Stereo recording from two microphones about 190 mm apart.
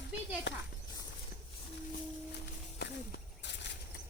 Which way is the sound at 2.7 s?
65° left (ahead or behind).